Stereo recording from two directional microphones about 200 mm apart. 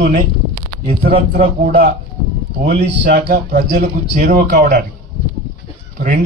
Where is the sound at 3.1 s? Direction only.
40° right (ahead or behind).